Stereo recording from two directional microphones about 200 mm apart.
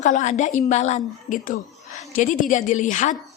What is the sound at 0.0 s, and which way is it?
A woman's voice, 35° left (ahead or behind).